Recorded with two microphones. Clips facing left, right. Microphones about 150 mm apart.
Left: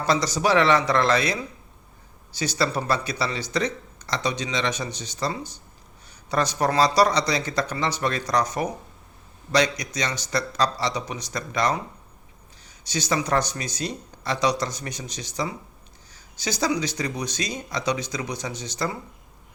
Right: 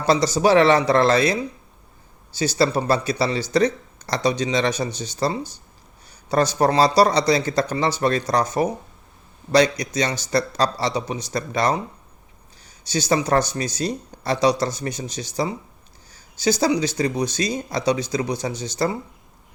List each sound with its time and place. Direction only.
0.1 s speech: 30° right (ahead or behind)
12.9 s speech: 30° right (ahead or behind)